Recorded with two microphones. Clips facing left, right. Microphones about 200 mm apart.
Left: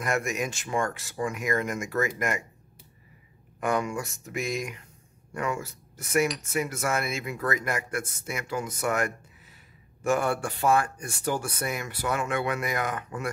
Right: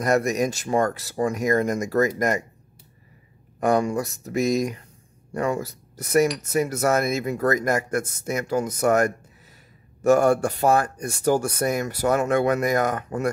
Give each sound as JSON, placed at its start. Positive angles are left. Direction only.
{"t": 0.0, "sound": "speech", "side_deg": -40}
{"t": 3.5, "sound": "speech", "side_deg": -35}